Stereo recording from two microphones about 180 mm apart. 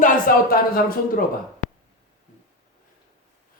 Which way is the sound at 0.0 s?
55° left (ahead or behind).